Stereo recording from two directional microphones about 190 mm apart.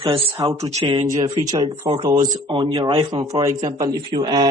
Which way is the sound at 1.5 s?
20° right (ahead or behind).